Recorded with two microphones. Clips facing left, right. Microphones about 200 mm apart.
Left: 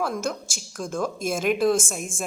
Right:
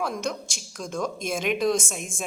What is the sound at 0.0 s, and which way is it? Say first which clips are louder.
A woman's voice: left 2 dB; 5° left (ahead or behind).